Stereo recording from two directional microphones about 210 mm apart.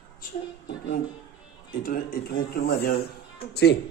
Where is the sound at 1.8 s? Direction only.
45° left (ahead or behind).